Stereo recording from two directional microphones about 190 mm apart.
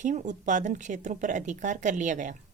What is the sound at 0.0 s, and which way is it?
Speech, 40° right (ahead or behind).